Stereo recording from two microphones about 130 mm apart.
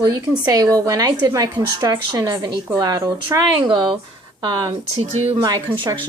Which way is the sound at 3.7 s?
40° right (ahead or behind).